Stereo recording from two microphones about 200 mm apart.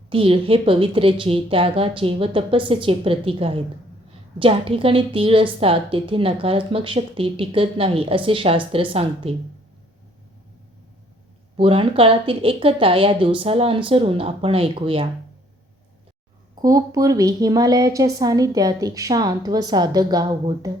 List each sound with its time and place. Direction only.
0.1 s a woman's voice: 25° right (ahead or behind)
11.5 s a woman's voice: 25° right (ahead or behind)
16.6 s a woman's voice: 15° right (ahead or behind)